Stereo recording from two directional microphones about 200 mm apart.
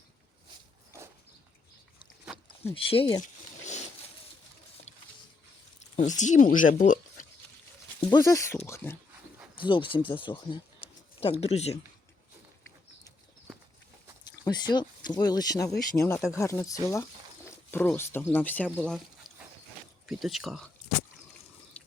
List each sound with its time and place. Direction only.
2.3 s a sound: centre (ahead or behind)
2.7 s speech: 25° left (ahead or behind)
6.0 s speech: 35° left (ahead or behind)
8.1 s speech: 15° left (ahead or behind)
9.6 s speech: 25° left (ahead or behind)
14.3 s a sound: 20° left (ahead or behind)
14.7 s speech: 20° left (ahead or behind)
20.1 s speech: centre (ahead or behind)
21.7 s water: 5° left (ahead or behind)